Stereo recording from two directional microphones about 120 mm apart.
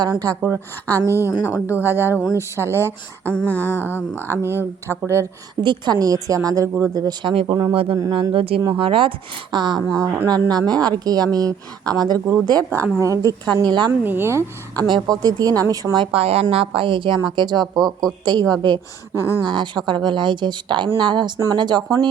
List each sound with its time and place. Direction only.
0.0 s speech: 30° right (ahead or behind)
1.5 s speech: 20° left (ahead or behind)
1.8 s speech: 20° right (ahead or behind)
2.7 s speech: 20° left (ahead or behind)
3.3 s a sound: 15° left (ahead or behind)
4.3 s speech: 20° right (ahead or behind)
5.6 s a woman's voice: 35° right (ahead or behind)
13.6 s speech: 40° right (ahead or behind)
14.0 s speech: 20° right (ahead or behind)
14.8 s speech: 40° right (ahead or behind)
16.1 s a woman's voice: 55° right (ahead or behind); by 17.7 s 40° right (ahead or behind)
17.7 s speech: centre (ahead or behind)
19.1 s speech: 25° left (ahead or behind)
19.4 s speech: 40° right (ahead or behind)